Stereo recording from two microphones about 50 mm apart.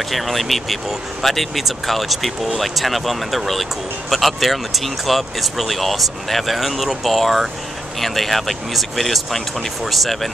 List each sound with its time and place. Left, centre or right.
0.1 s speech: centre